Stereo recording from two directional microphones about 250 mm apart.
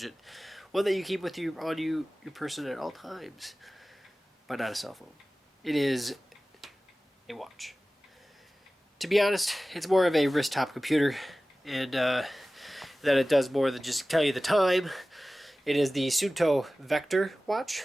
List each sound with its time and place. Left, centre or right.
0.0 s speech: centre
6.6 s tick-tock: centre
7.3 s speech: centre
9.0 s speech: centre